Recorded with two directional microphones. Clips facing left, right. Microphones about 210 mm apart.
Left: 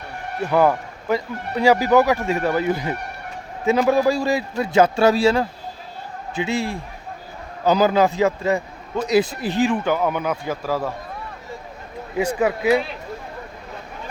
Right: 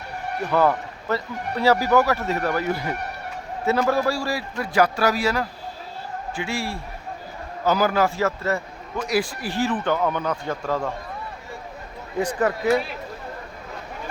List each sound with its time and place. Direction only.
0.5 s a man's voice: 15° left (ahead or behind)
12.1 s a man's voice: 10° left (ahead or behind)